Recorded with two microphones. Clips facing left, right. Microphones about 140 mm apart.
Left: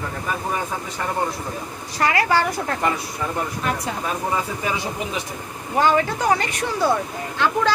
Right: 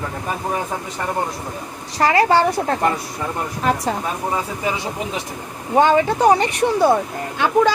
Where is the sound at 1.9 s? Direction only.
30° right (ahead or behind).